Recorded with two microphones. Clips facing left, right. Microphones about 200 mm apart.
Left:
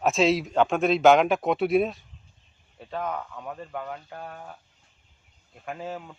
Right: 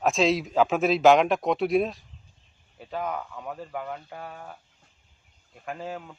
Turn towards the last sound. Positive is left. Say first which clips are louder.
# even
turn(degrees=0)  # may be behind; listen again after turning